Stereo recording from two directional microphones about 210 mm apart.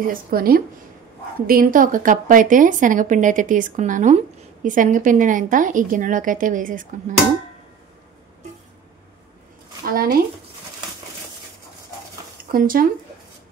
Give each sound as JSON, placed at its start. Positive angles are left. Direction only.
{"t": 0.0, "sound": "a woman's voice", "side_deg": -45}
{"t": 9.8, "sound": "speech", "side_deg": -45}
{"t": 12.4, "sound": "speech", "side_deg": -45}